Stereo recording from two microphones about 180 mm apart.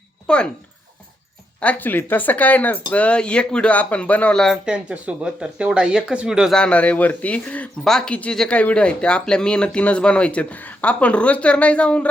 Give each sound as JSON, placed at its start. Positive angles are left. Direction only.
{"t": 0.3, "sound": "speech", "side_deg": 5}
{"t": 1.6, "sound": "speech", "side_deg": 10}